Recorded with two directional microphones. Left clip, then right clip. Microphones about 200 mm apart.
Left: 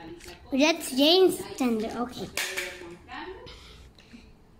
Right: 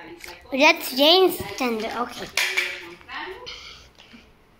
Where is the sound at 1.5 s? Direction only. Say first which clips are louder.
Right 4 dB; 35° left (ahead or behind).